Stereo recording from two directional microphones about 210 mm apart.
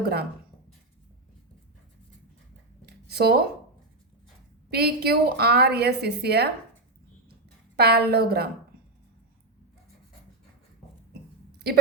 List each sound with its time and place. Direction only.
0.0 s a woman's voice: 50° right (ahead or behind)
2.8 s a sound: 50° right (ahead or behind)
4.7 s a woman's voice: 50° right (ahead or behind)
7.8 s a woman's voice: 50° right (ahead or behind)